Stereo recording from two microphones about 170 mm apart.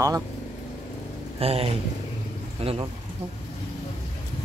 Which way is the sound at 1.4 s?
35° right (ahead or behind).